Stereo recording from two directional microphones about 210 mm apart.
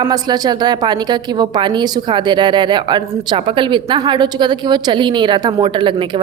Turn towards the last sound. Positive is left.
turn(degrees=-25)  # may be behind; listen again after turning